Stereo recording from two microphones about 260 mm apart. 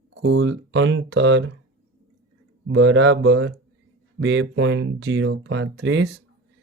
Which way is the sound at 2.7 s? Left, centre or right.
Right.